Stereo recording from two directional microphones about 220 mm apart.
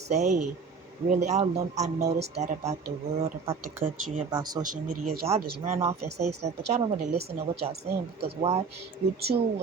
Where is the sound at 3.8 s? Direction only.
25° right (ahead or behind).